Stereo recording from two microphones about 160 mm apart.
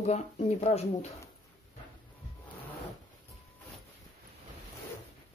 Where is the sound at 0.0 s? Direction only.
45° left (ahead or behind).